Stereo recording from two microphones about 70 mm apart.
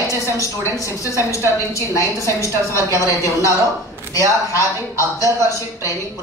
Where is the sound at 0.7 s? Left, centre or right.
Left.